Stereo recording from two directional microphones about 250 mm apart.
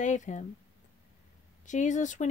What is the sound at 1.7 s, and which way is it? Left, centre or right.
Speech, left.